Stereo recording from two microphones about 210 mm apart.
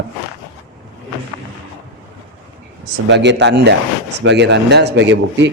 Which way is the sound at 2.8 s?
55° right (ahead or behind).